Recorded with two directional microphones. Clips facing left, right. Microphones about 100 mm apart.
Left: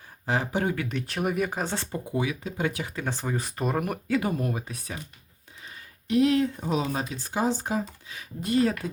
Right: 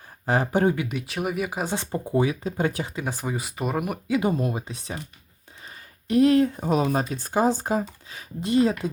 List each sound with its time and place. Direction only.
0.3 s speech: 45° right (ahead or behind)
0.8 s speech: 10° right (ahead or behind)
1.9 s speech: 35° right (ahead or behind)
2.8 s speech: 15° right (ahead or behind)
4.2 s speech: 20° right (ahead or behind)
6.1 s speech: 45° right (ahead or behind)
8.4 s speech: 25° right (ahead or behind)